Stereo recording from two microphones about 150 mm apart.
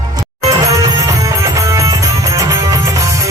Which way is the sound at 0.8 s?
20° right (ahead or behind).